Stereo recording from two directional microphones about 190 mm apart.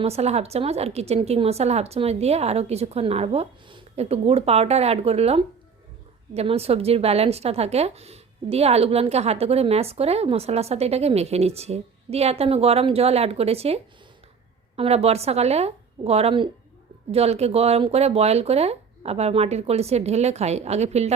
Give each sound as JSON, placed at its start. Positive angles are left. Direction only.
{"t": 0.0, "sound": "a woman's voice", "side_deg": -35}